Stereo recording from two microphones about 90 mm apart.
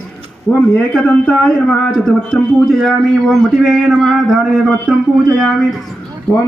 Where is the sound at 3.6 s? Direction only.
Centre (ahead or behind).